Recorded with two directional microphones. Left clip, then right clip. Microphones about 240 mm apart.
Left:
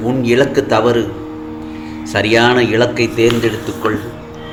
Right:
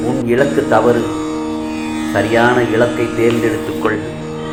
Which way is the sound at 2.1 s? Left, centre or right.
Left.